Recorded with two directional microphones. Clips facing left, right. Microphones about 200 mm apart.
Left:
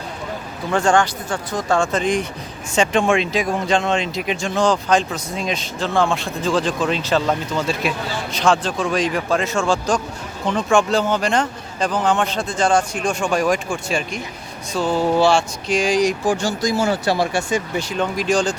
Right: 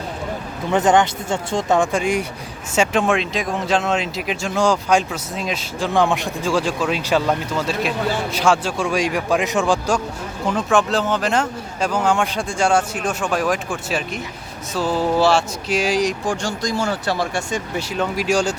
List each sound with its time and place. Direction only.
0.7 s speech: 20° right (ahead or behind); by 5.9 s 5° right (ahead or behind)
5.9 s speech: 15° right (ahead or behind)